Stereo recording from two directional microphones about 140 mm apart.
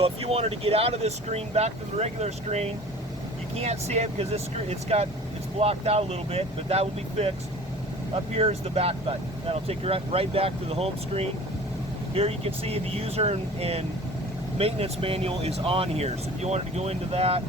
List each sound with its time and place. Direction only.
0.0 s speech: 45° right (ahead or behind)